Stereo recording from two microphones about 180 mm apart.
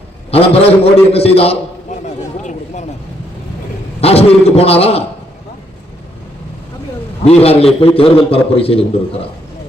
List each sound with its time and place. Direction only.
0.3 s a man's voice: 35° left (ahead or behind)
2.4 s a sound: 40° left (ahead or behind)
4.0 s a man's voice: 35° left (ahead or behind)
7.2 s a man's voice: 35° left (ahead or behind)